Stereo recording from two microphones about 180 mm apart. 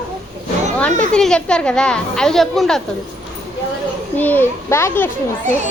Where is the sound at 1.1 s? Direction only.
5° left (ahead or behind).